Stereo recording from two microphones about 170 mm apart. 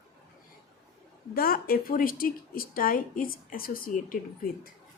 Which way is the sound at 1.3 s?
60° left (ahead or behind).